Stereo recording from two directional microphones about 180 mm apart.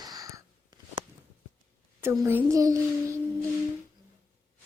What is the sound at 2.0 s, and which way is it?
Speech, 10° right (ahead or behind).